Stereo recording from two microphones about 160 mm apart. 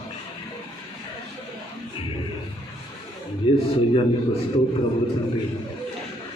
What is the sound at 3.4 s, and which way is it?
Speech, 30° left (ahead or behind).